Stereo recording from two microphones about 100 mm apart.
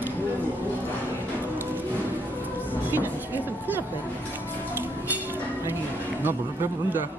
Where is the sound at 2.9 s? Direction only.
20° right (ahead or behind).